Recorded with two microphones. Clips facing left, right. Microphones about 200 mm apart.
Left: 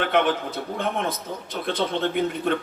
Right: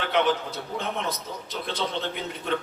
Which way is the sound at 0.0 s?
55° left (ahead or behind).